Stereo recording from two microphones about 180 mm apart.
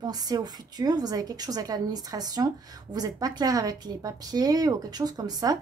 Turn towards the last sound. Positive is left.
turn(degrees=-20)  # may be behind; listen again after turning